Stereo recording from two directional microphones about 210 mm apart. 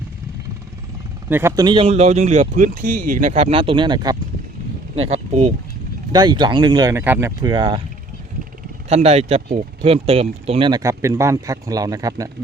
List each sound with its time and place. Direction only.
1.3 s speech: 10° right (ahead or behind)
4.9 s speech: 30° right (ahead or behind)
6.1 s speech: 20° right (ahead or behind)
8.9 s speech: 30° right (ahead or behind)